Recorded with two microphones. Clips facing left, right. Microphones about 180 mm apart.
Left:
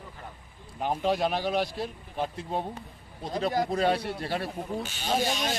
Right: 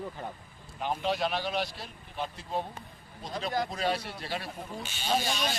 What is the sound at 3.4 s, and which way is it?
Speech, 55° left (ahead or behind).